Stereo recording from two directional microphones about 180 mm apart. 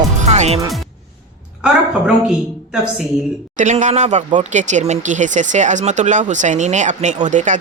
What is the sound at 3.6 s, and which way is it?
Speech, 40° right (ahead or behind).